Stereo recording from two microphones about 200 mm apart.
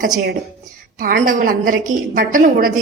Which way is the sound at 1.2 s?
45° right (ahead or behind).